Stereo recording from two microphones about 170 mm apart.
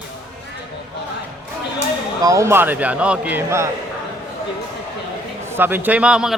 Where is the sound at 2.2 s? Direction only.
15° right (ahead or behind).